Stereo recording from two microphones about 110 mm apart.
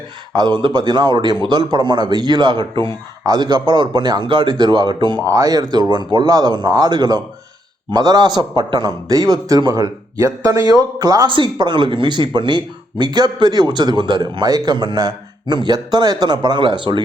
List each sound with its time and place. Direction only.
0.3 s speech: 40° right (ahead or behind)
5.2 s speech: 30° right (ahead or behind)
11.3 s speech: 45° right (ahead or behind)